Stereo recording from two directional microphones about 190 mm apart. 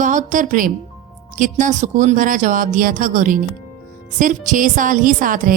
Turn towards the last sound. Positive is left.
turn(degrees=-45)  # may be behind; listen again after turning